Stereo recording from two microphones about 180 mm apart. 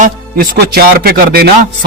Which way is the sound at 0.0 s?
60° right (ahead or behind).